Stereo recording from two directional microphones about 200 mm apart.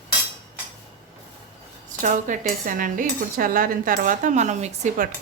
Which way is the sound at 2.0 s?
40° right (ahead or behind).